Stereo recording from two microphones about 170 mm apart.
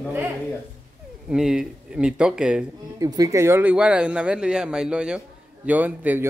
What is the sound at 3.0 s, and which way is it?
Speech, 20° right (ahead or behind).